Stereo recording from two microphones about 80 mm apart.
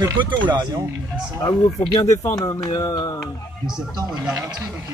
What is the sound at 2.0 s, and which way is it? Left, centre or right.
A man's voice, left.